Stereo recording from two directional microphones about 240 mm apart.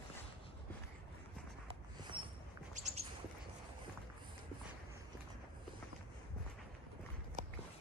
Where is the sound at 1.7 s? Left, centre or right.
Centre.